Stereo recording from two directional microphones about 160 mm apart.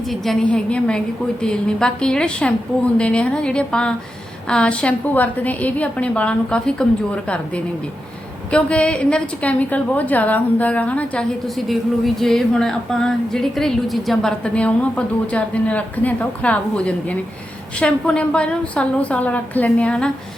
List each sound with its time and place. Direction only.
0.1 s a woman's voice: 5° left (ahead or behind)
8.4 s a woman's voice: 5° left (ahead or behind)